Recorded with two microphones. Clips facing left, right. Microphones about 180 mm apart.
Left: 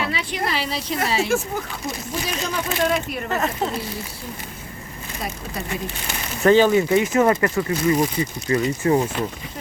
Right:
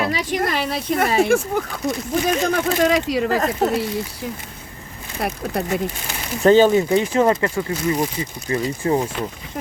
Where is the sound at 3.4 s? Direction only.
40° right (ahead or behind).